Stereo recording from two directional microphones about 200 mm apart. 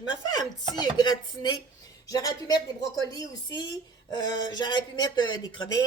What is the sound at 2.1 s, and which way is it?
Speech, 15° left (ahead or behind).